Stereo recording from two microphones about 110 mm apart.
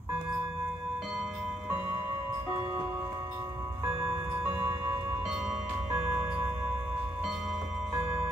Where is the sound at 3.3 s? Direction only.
35° right (ahead or behind).